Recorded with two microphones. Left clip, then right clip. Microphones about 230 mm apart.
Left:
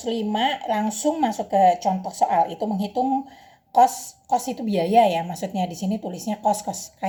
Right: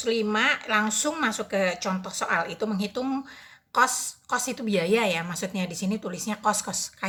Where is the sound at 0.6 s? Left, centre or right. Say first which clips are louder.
Left 2 dB; centre.